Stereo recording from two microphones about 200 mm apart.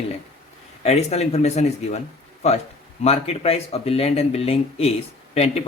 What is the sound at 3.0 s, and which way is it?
A man's voice, 30° left (ahead or behind).